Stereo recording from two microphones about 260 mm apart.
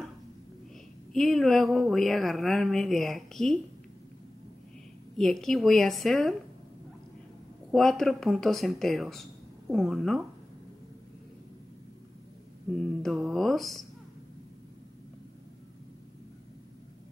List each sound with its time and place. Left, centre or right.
1.1 s speech: centre
5.1 s speech: centre
7.7 s speech: centre
13.0 s speech: centre